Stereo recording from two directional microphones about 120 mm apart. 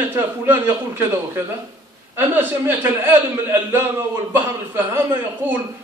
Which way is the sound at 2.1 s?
20° right (ahead or behind).